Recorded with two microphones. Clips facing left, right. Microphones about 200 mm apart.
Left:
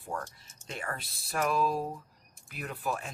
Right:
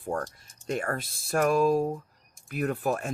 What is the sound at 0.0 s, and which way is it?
Speech, 55° right (ahead or behind).